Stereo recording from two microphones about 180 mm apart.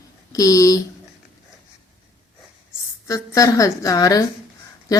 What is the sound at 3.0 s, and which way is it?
Speech, 20° left (ahead or behind).